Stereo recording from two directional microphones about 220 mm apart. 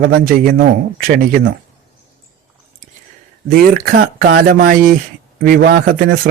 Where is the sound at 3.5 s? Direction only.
40° right (ahead or behind).